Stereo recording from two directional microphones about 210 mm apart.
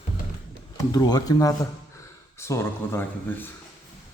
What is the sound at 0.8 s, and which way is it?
Speech, 20° left (ahead or behind).